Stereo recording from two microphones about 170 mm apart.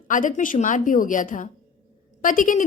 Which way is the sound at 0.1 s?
50° left (ahead or behind).